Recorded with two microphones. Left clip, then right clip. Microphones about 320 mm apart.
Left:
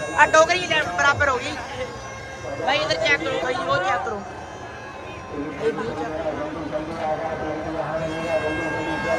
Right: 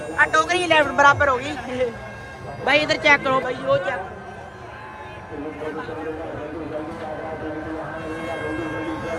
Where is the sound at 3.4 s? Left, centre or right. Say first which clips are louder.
Even; centre.